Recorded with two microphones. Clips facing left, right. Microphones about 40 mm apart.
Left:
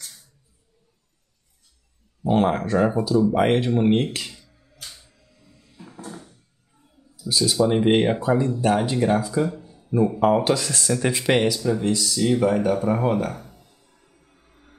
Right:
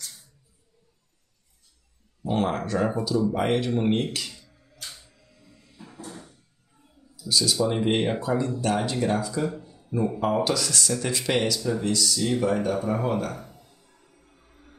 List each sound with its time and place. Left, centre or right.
2.2 s speech: centre
7.2 s speech: left; by 10.3 s centre
10.3 s speech: left